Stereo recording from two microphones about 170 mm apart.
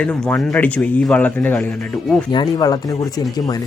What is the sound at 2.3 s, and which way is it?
Speech, 25° left (ahead or behind).